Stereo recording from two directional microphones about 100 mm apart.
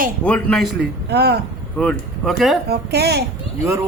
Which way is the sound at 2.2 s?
Centre (ahead or behind).